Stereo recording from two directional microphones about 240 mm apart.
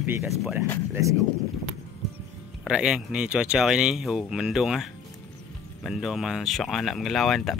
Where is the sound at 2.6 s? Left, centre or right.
Centre.